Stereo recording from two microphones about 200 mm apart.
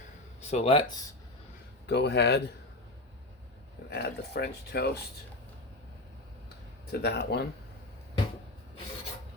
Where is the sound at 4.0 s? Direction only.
55° left (ahead or behind).